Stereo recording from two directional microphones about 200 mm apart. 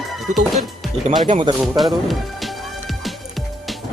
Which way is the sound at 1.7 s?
Centre (ahead or behind).